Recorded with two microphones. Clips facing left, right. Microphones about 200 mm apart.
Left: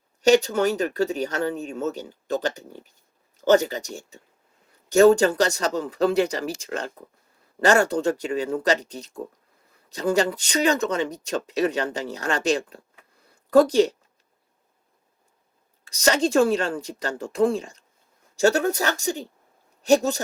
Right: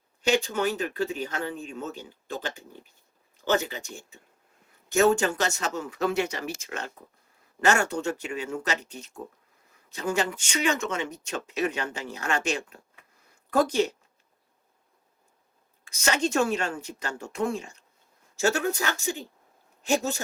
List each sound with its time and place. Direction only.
0.2 s speech: 40° left (ahead or behind)
13.2 s a sound: 35° left (ahead or behind)
15.8 s speech: 35° left (ahead or behind)